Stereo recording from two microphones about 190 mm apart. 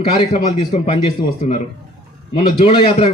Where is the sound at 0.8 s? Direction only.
30° left (ahead or behind).